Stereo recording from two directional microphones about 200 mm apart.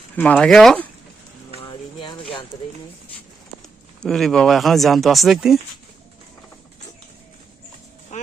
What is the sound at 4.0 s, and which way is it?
Speech, centre (ahead or behind).